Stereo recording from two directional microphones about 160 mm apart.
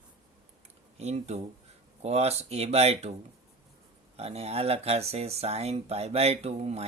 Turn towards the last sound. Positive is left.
turn(degrees=-40)  # may be behind; listen again after turning